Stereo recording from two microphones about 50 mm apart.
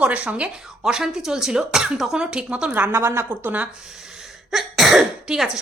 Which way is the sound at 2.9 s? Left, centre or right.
Right.